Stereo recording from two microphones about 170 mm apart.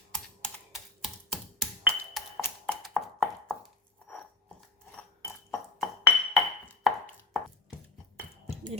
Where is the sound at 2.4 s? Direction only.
5° left (ahead or behind).